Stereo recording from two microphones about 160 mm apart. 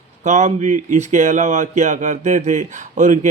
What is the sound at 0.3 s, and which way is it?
Speech, 50° right (ahead or behind).